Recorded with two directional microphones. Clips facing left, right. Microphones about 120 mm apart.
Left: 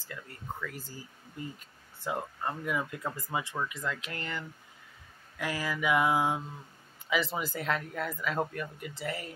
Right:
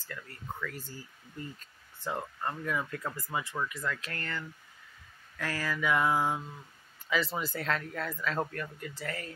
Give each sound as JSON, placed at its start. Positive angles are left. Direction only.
{"t": 0.1, "sound": "speech", "side_deg": 15}